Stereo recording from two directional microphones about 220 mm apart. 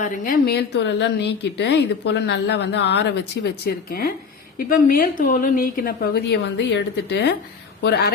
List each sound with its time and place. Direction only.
0.0 s a woman's voice: 40° left (ahead or behind)